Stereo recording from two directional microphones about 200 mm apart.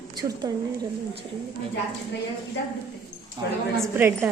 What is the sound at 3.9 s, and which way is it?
Speech, 10° right (ahead or behind).